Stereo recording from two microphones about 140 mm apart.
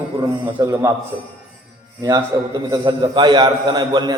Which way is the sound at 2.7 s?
30° right (ahead or behind).